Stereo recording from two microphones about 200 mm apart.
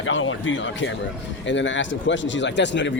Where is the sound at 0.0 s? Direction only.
75° left (ahead or behind).